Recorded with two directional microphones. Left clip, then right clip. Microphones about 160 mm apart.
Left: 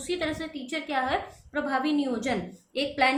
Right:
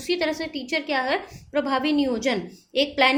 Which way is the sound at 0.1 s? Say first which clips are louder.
Right 6 dB; 40° right (ahead or behind).